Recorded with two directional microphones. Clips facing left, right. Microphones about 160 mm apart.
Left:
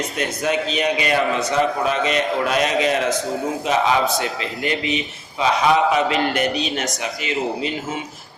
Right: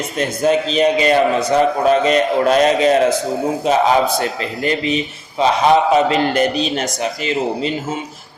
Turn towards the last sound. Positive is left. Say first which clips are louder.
# right 4 dB
turn(degrees=-35)  # may be behind; listen again after turning